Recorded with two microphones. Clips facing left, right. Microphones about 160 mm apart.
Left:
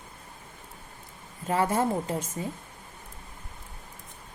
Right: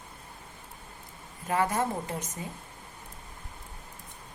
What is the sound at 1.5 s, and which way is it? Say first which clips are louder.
Speech: left 3 dB; 30° left (ahead or behind).